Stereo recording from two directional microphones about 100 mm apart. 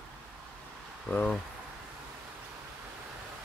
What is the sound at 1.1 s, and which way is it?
Speech, 10° left (ahead or behind).